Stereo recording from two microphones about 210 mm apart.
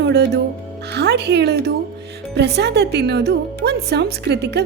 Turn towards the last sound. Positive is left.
turn(degrees=-50)  # may be behind; listen again after turning